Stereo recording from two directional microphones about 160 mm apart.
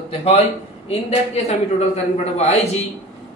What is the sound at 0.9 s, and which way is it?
A man's voice, 40° left (ahead or behind).